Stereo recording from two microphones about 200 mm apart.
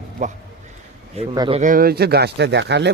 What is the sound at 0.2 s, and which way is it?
Speech, 35° right (ahead or behind).